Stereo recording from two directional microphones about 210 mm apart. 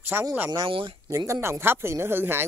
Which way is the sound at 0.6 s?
25° right (ahead or behind).